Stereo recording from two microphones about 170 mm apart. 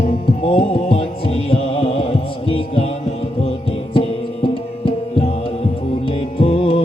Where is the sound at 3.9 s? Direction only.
35° left (ahead or behind).